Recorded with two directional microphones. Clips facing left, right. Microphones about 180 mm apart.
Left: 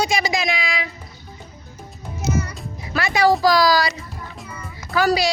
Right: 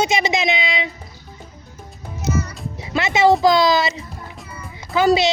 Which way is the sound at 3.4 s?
25° right (ahead or behind).